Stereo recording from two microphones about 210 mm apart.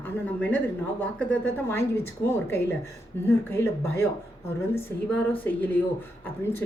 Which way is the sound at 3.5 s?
10° left (ahead or behind).